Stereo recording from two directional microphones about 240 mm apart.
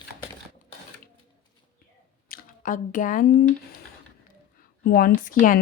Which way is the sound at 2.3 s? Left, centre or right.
Left.